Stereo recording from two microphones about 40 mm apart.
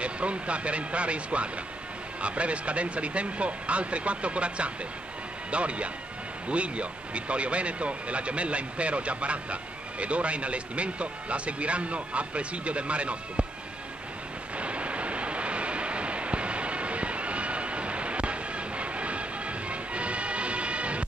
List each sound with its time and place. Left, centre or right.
0.0 s speech: right
14.6 s vehicle: right